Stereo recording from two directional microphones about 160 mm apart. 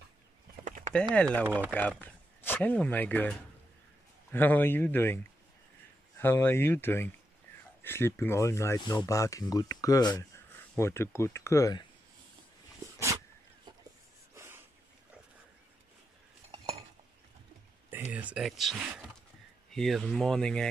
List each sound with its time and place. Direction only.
0.7 s a sound: 55° right (ahead or behind)
1.1 s speech: 10° left (ahead or behind)
1.4 s speech: 10° right (ahead or behind)
1.7 s speech: 10° left (ahead or behind)
14.3 s a sound: 15° right (ahead or behind)
16.5 s cutlery: 40° right (ahead or behind)
18.1 s speech: 5° right (ahead or behind)